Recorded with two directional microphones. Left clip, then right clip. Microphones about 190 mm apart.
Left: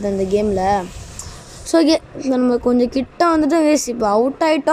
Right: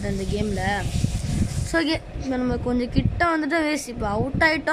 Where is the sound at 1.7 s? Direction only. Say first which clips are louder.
Left 9 dB; 15° left (ahead or behind).